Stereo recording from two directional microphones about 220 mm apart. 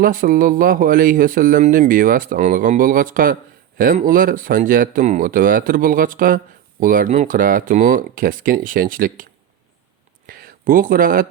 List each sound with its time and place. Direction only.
0.0 s speech: 40° right (ahead or behind)
10.2 s speech: 40° right (ahead or behind)